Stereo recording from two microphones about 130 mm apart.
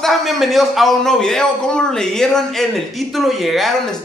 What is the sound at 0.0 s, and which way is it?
A man's voice, centre (ahead or behind).